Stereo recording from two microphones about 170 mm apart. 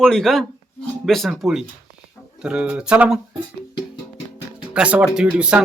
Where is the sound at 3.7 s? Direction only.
30° left (ahead or behind).